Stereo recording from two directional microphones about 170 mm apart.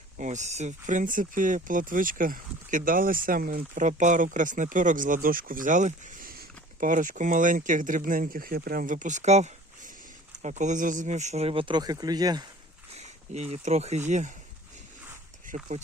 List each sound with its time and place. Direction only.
0.2 s speech: 45° right (ahead or behind); by 12.5 s 25° right (ahead or behind)
13.0 s speech: 40° right (ahead or behind)
15.4 s speech: 45° right (ahead or behind)